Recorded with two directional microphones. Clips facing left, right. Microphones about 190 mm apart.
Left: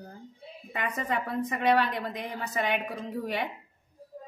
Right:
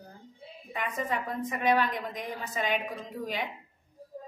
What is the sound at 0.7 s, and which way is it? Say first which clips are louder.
A woman's voice: left 1 dB; 65° left (ahead or behind).